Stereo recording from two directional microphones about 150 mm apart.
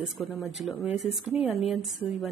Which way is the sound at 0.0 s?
Centre (ahead or behind).